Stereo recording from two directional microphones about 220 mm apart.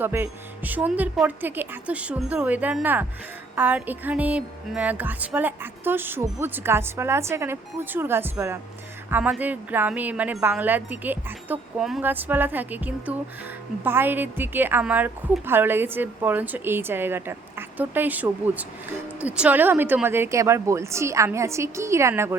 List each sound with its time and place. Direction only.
0.0 s speech: 10° right (ahead or behind)